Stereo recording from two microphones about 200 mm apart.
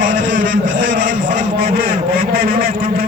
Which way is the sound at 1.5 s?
50° right (ahead or behind).